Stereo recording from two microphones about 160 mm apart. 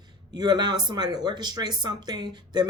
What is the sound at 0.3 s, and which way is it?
Speech, 25° right (ahead or behind).